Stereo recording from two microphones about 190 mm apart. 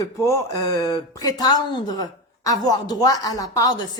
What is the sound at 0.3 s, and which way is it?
Speech, 20° left (ahead or behind).